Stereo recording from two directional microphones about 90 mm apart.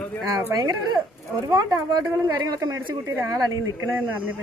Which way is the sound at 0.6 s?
45° right (ahead or behind).